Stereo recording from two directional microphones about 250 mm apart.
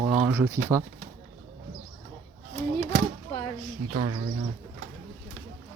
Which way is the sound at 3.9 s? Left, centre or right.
Right.